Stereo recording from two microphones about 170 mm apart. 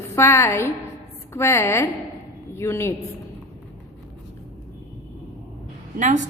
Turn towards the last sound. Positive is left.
turn(degrees=-45)  # may be behind; listen again after turning